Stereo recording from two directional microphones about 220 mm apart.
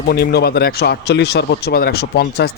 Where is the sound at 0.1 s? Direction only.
45° left (ahead or behind).